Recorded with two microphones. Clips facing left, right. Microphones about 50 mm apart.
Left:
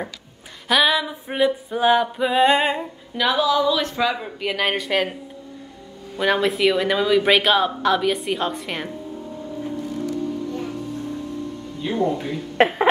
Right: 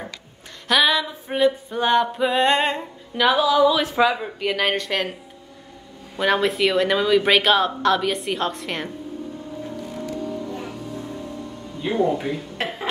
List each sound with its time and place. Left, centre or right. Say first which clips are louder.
0.7 s speech: even; centre
6.1 s speech: even; centre
10.0 s music: left 1 dB; centre
11.8 s speech: right 1 dB; centre
12.5 s speech: left 10 dB; left